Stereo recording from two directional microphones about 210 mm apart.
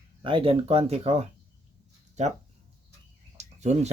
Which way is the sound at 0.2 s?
25° right (ahead or behind).